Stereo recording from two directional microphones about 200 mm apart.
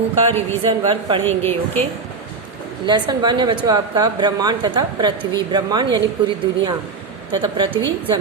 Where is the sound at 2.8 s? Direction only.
20° right (ahead or behind).